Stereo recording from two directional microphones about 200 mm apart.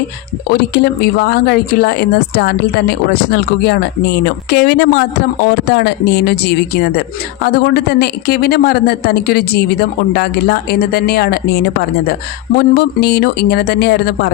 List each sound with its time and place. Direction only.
0.5 s a man's voice: 50° left (ahead or behind)
12.7 s a man's voice: 55° left (ahead or behind)